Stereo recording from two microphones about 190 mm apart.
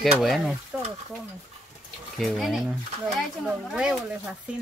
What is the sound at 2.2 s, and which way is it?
Speech, centre (ahead or behind).